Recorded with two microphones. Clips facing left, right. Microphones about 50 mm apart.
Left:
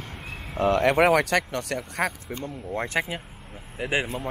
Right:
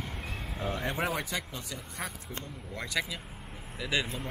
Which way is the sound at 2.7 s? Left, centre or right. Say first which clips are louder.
Left 6 dB; left.